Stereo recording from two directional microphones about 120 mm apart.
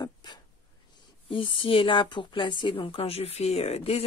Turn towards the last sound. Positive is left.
turn(degrees=55)  # may be behind; listen again after turning